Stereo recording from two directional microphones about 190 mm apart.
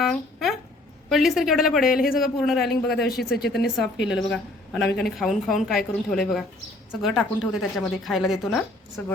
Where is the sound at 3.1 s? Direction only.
55° left (ahead or behind).